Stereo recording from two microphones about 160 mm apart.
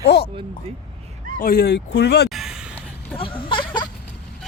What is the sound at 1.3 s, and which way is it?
Speech, 65° left (ahead or behind).